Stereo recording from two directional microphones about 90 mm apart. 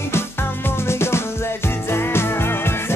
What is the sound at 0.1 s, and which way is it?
Music, 25° left (ahead or behind).